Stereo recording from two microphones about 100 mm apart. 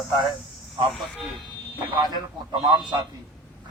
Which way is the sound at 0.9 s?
Centre (ahead or behind).